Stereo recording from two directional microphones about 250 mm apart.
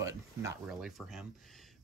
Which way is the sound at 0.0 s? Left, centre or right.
Centre.